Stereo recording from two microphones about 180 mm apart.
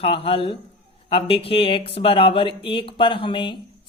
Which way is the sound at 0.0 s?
30° left (ahead or behind).